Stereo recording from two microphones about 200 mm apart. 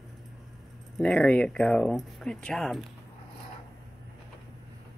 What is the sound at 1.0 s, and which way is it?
Speech, 5° left (ahead or behind).